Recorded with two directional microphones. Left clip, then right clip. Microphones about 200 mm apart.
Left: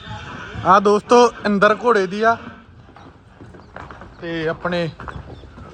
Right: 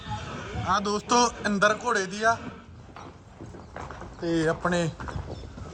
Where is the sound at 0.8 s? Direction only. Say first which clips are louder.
Left 13 dB; 10° right (ahead or behind).